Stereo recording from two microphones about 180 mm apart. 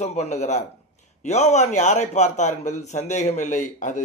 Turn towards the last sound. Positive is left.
turn(degrees=45)  # may be behind; listen again after turning